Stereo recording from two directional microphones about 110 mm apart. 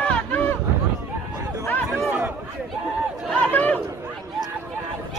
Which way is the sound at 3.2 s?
15° left (ahead or behind).